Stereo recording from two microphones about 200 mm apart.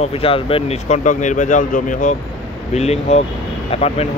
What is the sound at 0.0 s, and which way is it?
Speech, 30° left (ahead or behind).